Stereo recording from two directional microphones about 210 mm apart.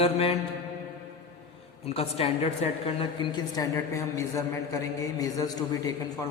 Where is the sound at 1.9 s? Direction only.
30° left (ahead or behind).